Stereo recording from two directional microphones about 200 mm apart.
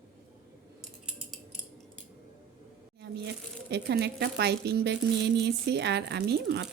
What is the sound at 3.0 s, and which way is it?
Speech, 55° right (ahead or behind).